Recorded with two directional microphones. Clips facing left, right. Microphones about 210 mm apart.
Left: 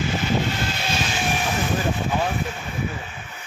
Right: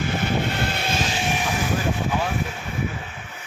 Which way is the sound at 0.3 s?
60° right (ahead or behind).